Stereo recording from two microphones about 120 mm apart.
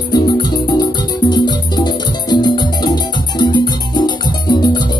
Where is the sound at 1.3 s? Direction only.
35° left (ahead or behind).